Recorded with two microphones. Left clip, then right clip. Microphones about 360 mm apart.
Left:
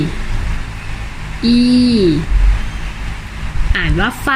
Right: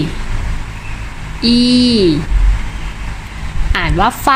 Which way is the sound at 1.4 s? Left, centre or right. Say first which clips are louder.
Right 1 dB; centre.